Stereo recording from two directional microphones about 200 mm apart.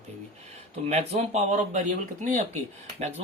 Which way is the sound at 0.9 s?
35° right (ahead or behind).